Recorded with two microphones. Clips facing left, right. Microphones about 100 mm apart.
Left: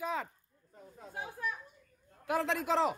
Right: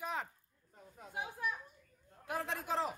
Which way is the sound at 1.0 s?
15° right (ahead or behind).